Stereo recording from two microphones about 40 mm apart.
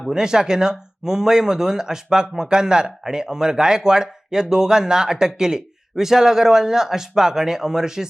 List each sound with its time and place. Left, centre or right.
0.1 s a man's voice: centre
2.5 s a man's voice: centre